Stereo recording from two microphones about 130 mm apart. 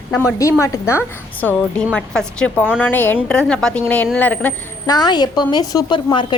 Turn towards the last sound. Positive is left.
turn(degrees=40)  # may be behind; listen again after turning